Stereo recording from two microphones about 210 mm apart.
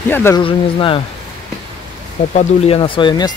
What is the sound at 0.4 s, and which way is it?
Speech, 25° left (ahead or behind).